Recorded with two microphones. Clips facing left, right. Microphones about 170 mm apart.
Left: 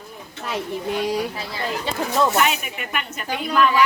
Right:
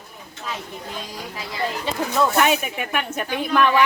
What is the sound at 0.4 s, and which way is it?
Speech, 70° left (ahead or behind).